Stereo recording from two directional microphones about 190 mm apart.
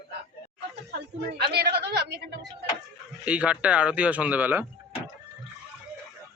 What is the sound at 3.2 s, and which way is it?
Speech, 5° right (ahead or behind).